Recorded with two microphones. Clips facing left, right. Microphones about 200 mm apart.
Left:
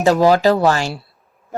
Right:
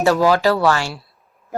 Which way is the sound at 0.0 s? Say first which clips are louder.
Left 2 dB; 20° left (ahead or behind).